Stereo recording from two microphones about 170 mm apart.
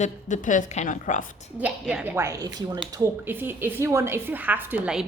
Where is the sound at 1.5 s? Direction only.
10° right (ahead or behind).